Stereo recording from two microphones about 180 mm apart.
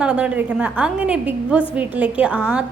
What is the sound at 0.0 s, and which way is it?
A woman's voice, 5° right (ahead or behind).